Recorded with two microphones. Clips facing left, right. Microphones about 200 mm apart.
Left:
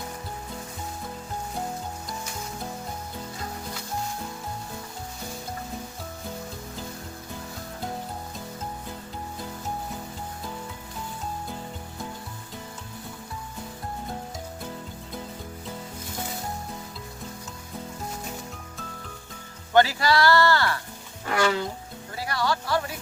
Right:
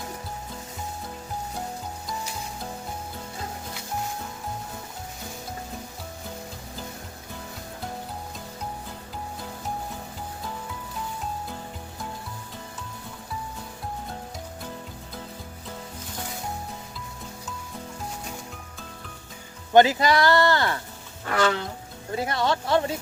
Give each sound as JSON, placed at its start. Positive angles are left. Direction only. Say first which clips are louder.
{"t": 19.7, "sound": "speech", "louder": "right 3 dB", "side_deg": -20}
{"t": 21.3, "sound": "music", "louder": "right 1 dB", "side_deg": 10}
{"t": 22.1, "sound": "speech", "louder": "right 3 dB", "side_deg": -20}